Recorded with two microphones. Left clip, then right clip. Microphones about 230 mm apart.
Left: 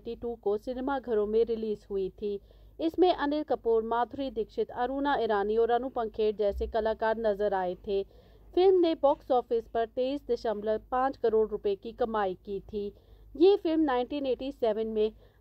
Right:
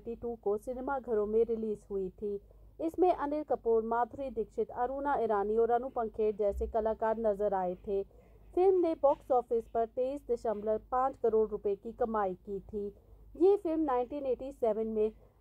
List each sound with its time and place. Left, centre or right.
0.1 s a woman's voice: left
10.4 s a woman's voice: left